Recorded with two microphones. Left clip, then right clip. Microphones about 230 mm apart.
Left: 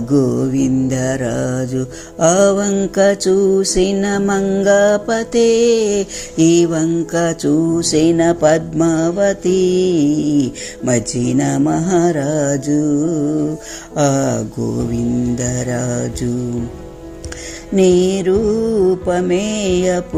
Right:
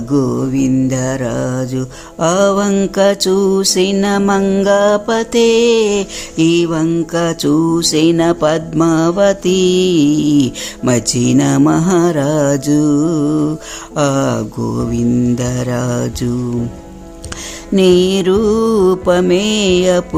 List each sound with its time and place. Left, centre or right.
0.1 s mantra: centre
2.2 s music: centre
17.7 s music: centre